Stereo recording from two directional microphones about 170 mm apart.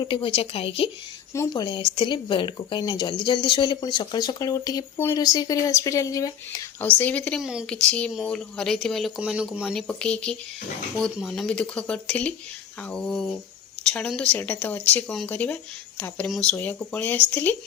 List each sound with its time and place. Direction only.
0.0 s speech: 30° left (ahead or behind)
1.3 s speech: 20° left (ahead or behind)
7.0 s speech: 10° left (ahead or behind)